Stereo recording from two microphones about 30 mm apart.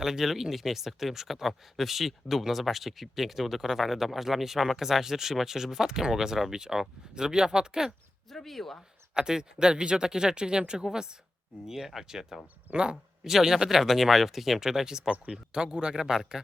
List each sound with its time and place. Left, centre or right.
0.0 s speech: centre; by 7.8 s right
8.3 s speech: centre
9.1 s speech: right
12.7 s speech: right
13.2 s speech: centre
14.8 s speech: right